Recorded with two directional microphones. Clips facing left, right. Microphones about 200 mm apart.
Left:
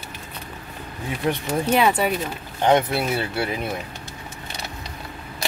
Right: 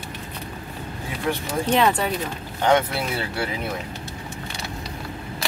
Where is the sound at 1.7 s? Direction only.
5° left (ahead or behind).